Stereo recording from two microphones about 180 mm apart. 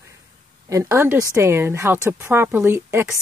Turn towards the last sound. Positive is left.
turn(degrees=-15)  # may be behind; listen again after turning